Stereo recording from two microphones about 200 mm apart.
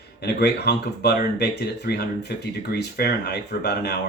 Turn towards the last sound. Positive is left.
turn(degrees=55)  # may be behind; listen again after turning